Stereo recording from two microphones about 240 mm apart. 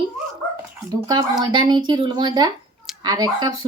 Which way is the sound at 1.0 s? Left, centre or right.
Centre.